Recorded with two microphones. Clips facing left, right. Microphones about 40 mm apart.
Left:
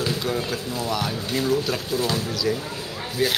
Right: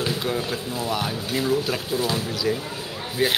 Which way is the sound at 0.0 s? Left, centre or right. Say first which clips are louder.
Even; centre.